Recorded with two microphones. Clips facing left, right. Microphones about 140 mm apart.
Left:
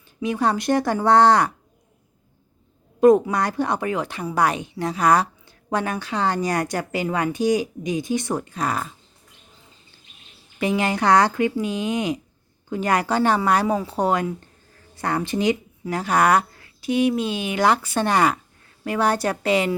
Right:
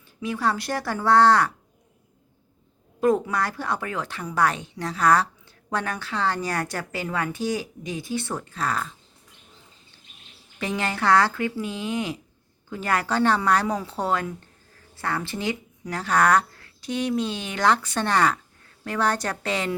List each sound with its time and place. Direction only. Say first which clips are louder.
0.2 s speech: left 4 dB; 20° left (ahead or behind)
3.0 s a woman's voice: left 7 dB; 20° left (ahead or behind)
10.6 s a woman's voice: left 5 dB; 15° left (ahead or behind)